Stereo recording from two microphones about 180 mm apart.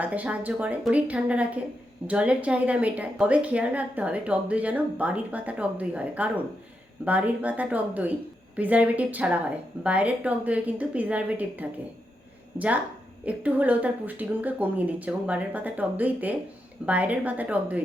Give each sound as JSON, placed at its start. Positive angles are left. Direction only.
{"t": 0.0, "sound": "a woman's voice", "side_deg": -10}